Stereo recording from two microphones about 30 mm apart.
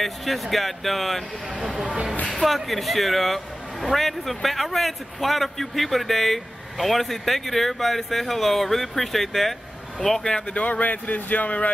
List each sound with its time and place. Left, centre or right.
0.0 s a man's voice: centre
2.3 s a man's voice: centre
10.4 s speech: left